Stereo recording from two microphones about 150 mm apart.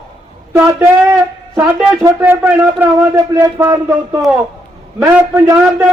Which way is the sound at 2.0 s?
15° right (ahead or behind).